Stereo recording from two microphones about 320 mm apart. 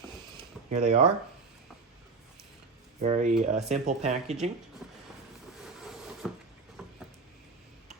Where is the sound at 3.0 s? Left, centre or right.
Right.